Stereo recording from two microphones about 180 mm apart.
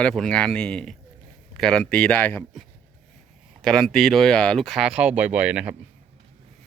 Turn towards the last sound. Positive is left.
turn(degrees=-5)  # may be behind; listen again after turning